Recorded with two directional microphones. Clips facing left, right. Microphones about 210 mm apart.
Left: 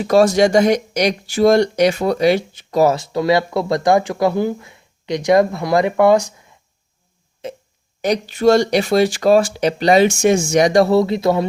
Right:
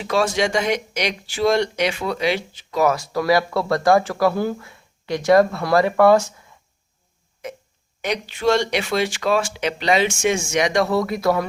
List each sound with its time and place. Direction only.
0.0 s speech: 40° left (ahead or behind)
2.9 s speech: 25° left (ahead or behind)
7.4 s burping: 25° left (ahead or behind)
8.0 s speech: 40° left (ahead or behind)